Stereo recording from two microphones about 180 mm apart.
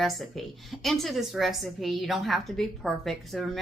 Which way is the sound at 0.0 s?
Centre (ahead or behind).